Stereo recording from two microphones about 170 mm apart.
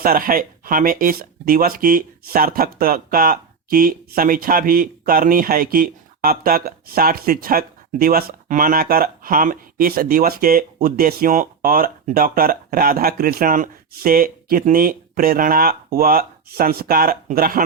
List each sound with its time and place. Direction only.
0.0 s speech: 60° right (ahead or behind)